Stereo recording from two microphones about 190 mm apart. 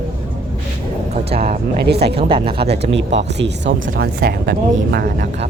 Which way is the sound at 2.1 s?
30° right (ahead or behind).